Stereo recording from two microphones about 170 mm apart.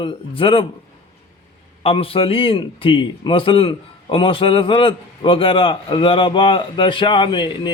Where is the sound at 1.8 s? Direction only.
35° left (ahead or behind).